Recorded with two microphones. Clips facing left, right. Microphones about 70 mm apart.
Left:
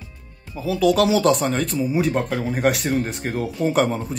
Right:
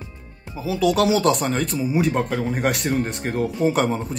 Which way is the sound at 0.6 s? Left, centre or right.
Centre.